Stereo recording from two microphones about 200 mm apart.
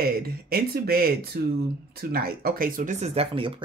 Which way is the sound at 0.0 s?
50° right (ahead or behind).